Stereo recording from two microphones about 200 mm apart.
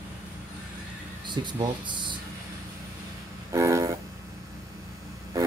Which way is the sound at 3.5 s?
15° right (ahead or behind).